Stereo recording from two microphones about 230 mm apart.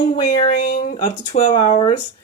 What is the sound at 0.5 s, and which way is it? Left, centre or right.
Speech, left.